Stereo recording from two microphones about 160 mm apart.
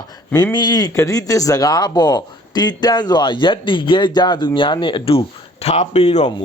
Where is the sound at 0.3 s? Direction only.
25° left (ahead or behind).